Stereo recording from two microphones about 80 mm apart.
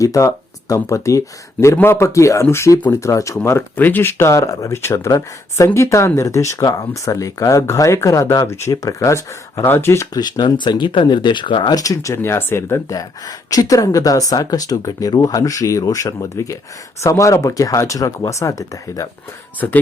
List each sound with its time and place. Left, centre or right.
0.0 s speech: left
6.6 s speech: left
9.6 s speech: left
10.2 s speech: left
11.8 s speech: left
12.9 s speech: left
19.5 s speech: left